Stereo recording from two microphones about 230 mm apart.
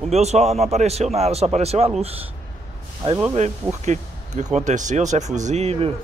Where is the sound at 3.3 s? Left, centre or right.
Right.